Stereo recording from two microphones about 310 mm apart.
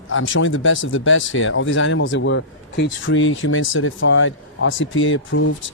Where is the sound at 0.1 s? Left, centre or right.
Left.